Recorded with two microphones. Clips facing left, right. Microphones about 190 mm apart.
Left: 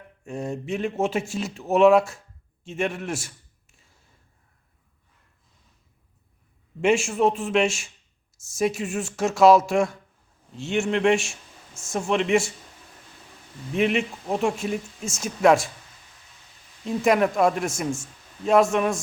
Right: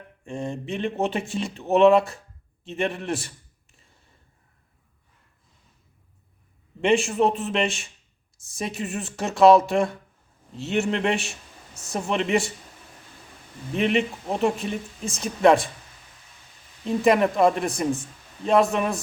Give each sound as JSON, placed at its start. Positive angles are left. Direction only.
{"t": 0.3, "sound": "speech", "side_deg": 5}
{"t": 2.6, "sound": "a sound", "side_deg": 0}
{"t": 6.8, "sound": "speech", "side_deg": 0}
{"t": 13.7, "sound": "speech", "side_deg": 0}
{"t": 16.8, "sound": "speech", "side_deg": 0}